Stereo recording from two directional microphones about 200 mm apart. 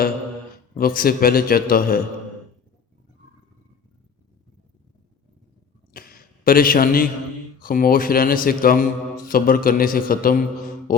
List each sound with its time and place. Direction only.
0.8 s a man's voice: 45° left (ahead or behind)
5.9 s a sound: 45° left (ahead or behind)
7.6 s a man's voice: 45° left (ahead or behind)